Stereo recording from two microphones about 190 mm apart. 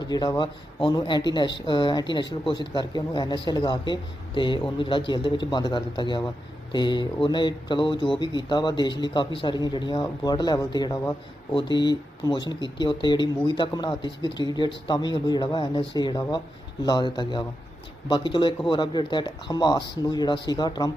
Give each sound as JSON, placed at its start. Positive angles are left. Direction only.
{"t": 0.0, "sound": "speech", "side_deg": 20}